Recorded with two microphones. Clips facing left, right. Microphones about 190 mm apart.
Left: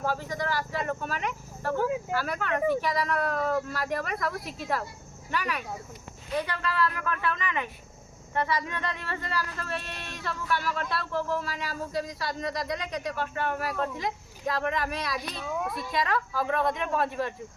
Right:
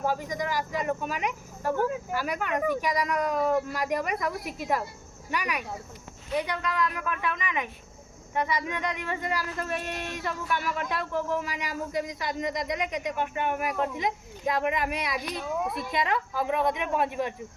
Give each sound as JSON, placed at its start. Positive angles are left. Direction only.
{"t": 0.0, "sound": "speech", "side_deg": -15}